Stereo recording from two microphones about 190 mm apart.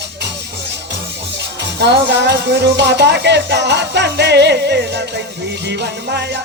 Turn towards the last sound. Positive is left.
turn(degrees=-60)  # may be behind; listen again after turning